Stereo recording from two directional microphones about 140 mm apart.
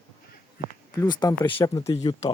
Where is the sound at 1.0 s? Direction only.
30° left (ahead or behind).